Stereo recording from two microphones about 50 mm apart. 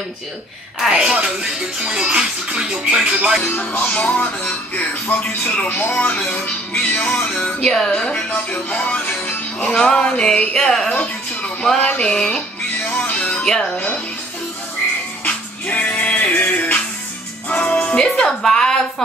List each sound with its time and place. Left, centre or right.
0.9 s speech: centre
3.5 s speech: left
8.3 s speech: left
10.6 s speech: centre
12.9 s music: left
13.4 s music: centre
15.2 s music: left
17.5 s music: centre